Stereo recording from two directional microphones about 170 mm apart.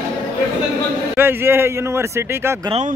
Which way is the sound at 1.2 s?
15° right (ahead or behind).